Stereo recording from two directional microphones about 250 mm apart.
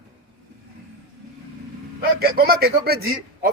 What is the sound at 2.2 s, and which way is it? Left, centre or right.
Speech, right.